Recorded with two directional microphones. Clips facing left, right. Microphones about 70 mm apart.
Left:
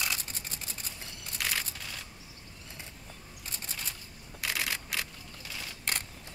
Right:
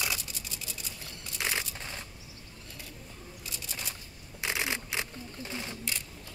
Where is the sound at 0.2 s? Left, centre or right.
Left.